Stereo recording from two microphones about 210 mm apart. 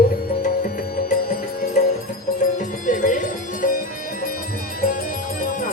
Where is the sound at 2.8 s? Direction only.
40° left (ahead or behind).